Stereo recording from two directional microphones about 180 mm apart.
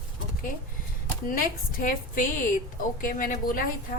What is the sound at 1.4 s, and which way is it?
A woman's voice, 50° left (ahead or behind).